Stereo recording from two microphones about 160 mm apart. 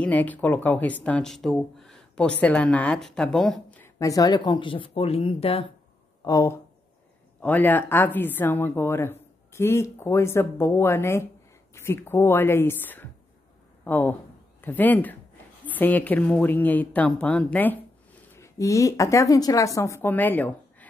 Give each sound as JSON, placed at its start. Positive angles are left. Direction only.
{"t": 0.0, "sound": "speech", "side_deg": 10}
{"t": 4.0, "sound": "speech", "side_deg": 20}
{"t": 6.2, "sound": "speech", "side_deg": 20}